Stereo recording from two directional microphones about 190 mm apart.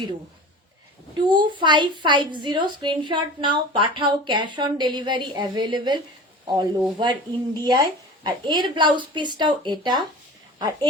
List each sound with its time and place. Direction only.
1.2 s a woman's voice: 25° right (ahead or behind)